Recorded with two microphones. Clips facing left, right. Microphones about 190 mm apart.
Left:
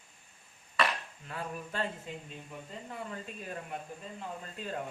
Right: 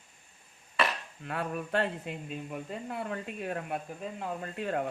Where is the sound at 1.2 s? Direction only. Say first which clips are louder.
Right 6 dB; 65° right (ahead or behind).